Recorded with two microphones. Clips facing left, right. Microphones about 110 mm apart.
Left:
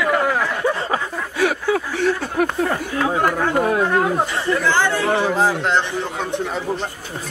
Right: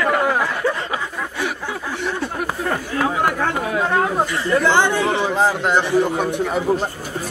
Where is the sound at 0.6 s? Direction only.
15° left (ahead or behind).